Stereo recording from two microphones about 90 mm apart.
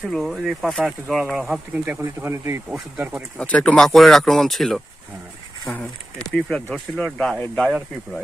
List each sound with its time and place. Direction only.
0.1 s speech: centre (ahead or behind)
1.7 s speech: 20° right (ahead or behind)
3.0 s speech: 15° right (ahead or behind)
3.3 s speech: 15° left (ahead or behind)
6.7 s speech: 10° left (ahead or behind)